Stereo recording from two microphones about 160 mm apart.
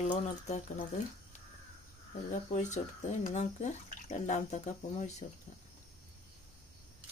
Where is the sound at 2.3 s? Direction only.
50° left (ahead or behind).